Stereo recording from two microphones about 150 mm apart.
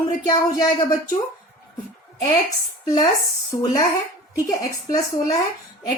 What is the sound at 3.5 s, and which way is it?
A woman's voice, 25° left (ahead or behind).